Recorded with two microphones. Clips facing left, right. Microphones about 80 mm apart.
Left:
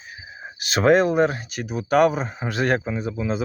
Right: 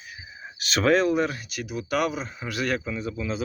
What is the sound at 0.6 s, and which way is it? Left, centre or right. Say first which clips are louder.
Speech: left 4 dB; left.